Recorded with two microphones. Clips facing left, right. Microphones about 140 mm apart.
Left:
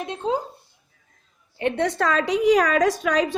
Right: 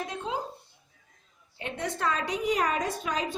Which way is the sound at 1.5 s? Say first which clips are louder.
Left 11 dB; 70° left (ahead or behind).